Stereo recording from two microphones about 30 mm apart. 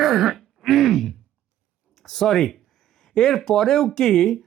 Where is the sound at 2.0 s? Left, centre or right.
Centre.